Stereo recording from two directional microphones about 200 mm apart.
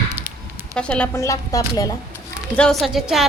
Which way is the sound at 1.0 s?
15° left (ahead or behind).